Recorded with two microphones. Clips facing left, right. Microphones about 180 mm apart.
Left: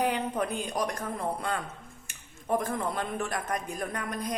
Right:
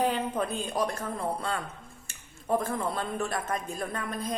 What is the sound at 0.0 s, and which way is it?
Speech, 15° left (ahead or behind).